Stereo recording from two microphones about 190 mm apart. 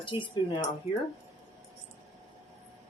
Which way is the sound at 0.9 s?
10° right (ahead or behind).